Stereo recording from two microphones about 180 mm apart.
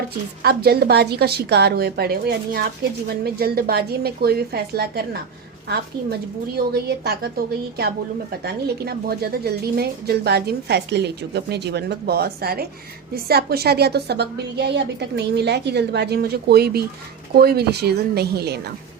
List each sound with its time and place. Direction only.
0.4 s speech: 60° right (ahead or behind)